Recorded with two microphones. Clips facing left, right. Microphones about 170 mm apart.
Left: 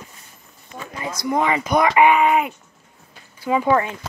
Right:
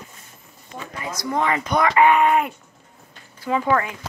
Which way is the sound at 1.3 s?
10° left (ahead or behind).